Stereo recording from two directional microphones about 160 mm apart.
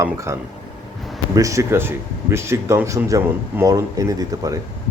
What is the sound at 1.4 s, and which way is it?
Speech, 20° right (ahead or behind).